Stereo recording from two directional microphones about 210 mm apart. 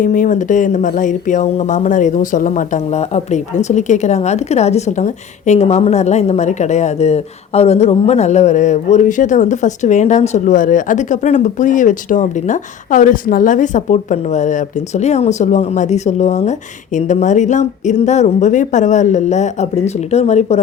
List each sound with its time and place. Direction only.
0.0 s speech: 40° left (ahead or behind)